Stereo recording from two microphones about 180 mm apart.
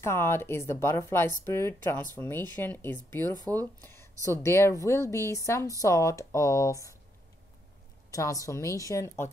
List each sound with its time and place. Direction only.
0.0 s speech: 15° left (ahead or behind)
8.1 s speech: 20° left (ahead or behind)